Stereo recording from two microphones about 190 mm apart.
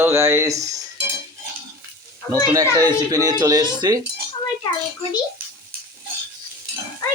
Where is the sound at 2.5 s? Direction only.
20° right (ahead or behind).